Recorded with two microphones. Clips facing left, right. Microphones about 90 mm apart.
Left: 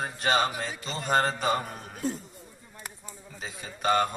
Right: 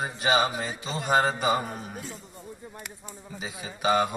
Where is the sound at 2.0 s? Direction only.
40° left (ahead or behind).